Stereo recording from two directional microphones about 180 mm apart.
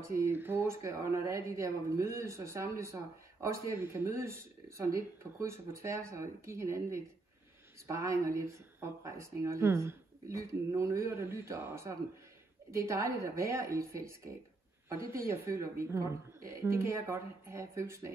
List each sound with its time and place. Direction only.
0.2 s speech: 15° right (ahead or behind)